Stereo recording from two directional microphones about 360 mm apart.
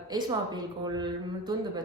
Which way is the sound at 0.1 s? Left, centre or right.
Centre.